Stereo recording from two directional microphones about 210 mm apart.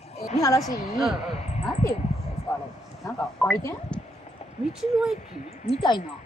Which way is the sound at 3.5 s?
15° left (ahead or behind).